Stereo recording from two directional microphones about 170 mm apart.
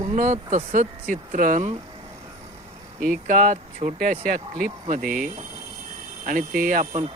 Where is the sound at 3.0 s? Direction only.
55° right (ahead or behind).